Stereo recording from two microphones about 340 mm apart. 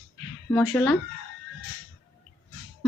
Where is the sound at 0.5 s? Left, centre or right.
Centre.